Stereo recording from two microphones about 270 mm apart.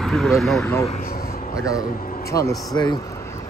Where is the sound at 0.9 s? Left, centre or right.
Left.